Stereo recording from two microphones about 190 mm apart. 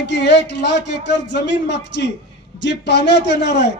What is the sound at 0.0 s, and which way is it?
A man's voice, 65° left (ahead or behind).